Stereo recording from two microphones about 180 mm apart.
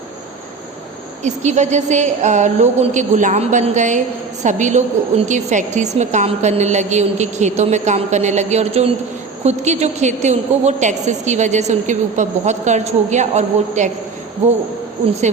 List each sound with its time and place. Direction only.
1.2 s a woman's voice: 40° right (ahead or behind)